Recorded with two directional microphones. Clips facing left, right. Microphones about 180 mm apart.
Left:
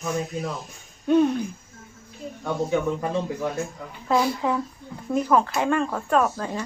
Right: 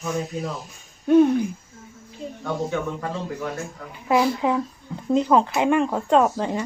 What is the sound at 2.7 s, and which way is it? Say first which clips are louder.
Speech: left 3 dB; 20° left (ahead or behind).